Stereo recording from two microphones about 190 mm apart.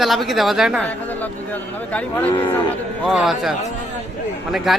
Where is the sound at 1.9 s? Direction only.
10° left (ahead or behind).